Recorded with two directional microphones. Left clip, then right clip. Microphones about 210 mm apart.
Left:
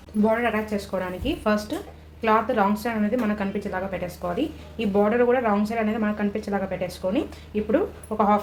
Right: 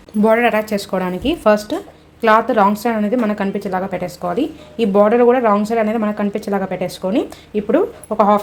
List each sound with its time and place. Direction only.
0.2 s speech: 50° right (ahead or behind)